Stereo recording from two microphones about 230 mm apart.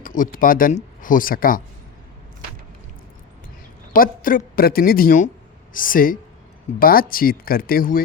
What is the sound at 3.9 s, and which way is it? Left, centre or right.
Speech, left.